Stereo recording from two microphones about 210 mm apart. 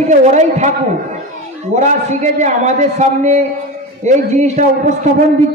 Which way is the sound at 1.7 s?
35° right (ahead or behind).